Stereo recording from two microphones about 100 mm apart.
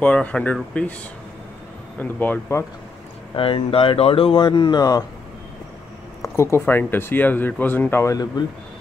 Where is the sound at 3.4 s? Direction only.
65° left (ahead or behind); by 5.0 s 40° left (ahead or behind).